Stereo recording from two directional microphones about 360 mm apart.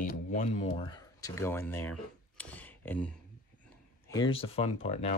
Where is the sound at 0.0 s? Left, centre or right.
Left; by 3.1 s centre.